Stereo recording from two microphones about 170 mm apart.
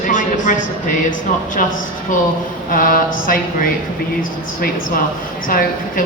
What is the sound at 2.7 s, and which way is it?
Speech, 55° left (ahead or behind).